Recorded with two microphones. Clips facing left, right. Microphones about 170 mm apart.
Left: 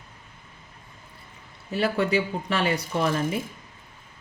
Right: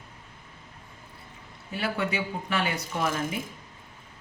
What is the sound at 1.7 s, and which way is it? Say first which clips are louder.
Speech: left 6 dB; 35° left (ahead or behind).